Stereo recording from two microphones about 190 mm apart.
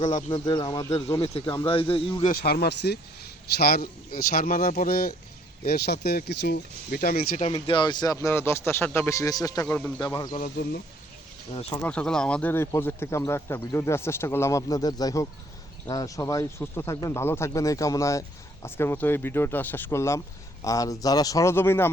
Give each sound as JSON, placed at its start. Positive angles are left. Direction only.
{"t": 0.3, "sound": "speech", "side_deg": 25}
{"t": 1.2, "sound": "speech", "side_deg": 30}
{"t": 2.2, "sound": "speech", "side_deg": 55}
{"t": 7.5, "sound": "speech", "side_deg": 25}
{"t": 10.0, "sound": "speech", "side_deg": 20}
{"t": 11.5, "sound": "speech", "side_deg": 30}
{"t": 11.8, "sound": "speech", "side_deg": 5}